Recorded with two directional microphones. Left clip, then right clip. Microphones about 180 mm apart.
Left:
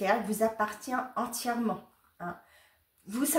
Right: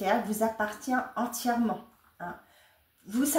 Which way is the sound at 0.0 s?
35° left (ahead or behind).